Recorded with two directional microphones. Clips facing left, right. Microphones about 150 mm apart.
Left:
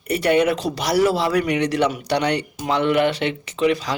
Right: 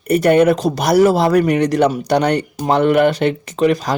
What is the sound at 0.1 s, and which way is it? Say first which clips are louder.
Speech: right 6 dB; 45° right (ahead or behind).